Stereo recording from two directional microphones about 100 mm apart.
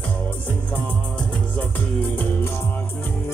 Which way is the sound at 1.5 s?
20° left (ahead or behind).